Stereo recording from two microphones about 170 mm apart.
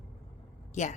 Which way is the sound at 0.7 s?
45° left (ahead or behind).